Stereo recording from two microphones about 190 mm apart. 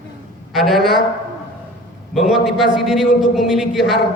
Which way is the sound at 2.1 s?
Centre (ahead or behind).